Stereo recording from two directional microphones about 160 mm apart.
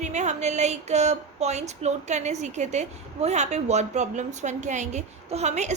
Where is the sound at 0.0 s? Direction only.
45° right (ahead or behind).